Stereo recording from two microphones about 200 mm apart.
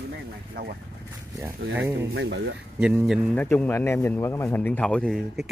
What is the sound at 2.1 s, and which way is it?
Speech, 60° right (ahead or behind).